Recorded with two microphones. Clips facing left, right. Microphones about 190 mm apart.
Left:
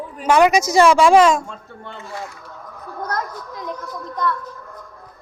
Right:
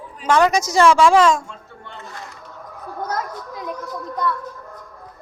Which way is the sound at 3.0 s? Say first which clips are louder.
Even; 5° right (ahead or behind).